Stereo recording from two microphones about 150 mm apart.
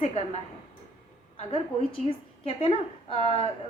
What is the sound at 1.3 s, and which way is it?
A woman's voice, 35° left (ahead or behind).